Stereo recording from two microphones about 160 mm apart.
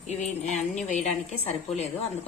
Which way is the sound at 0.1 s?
45° left (ahead or behind).